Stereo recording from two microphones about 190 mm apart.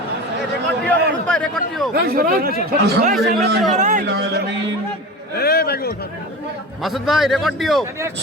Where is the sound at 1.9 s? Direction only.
50° right (ahead or behind).